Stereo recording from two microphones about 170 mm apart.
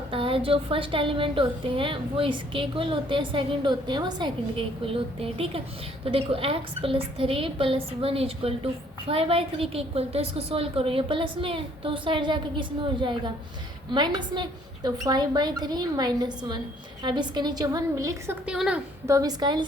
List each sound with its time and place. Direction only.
0.1 s a woman's voice: 30° right (ahead or behind)
18.4 s a woman's voice: 5° right (ahead or behind)
19.0 s a woman's voice: 20° right (ahead or behind)